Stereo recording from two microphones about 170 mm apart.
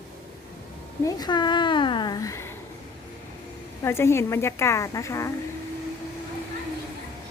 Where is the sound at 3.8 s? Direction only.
15° left (ahead or behind).